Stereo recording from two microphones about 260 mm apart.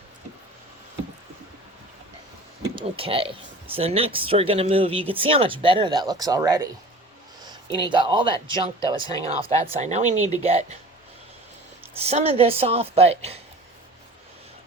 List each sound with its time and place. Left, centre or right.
2.7 s speech: right
11.9 s speech: right